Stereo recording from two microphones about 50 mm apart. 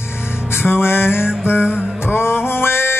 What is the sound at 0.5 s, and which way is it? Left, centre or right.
Music, left.